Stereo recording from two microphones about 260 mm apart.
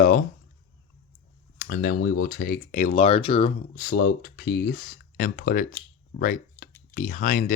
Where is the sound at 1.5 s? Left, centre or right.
Left.